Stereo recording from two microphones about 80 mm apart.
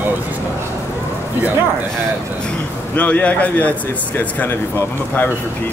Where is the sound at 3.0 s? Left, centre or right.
Centre.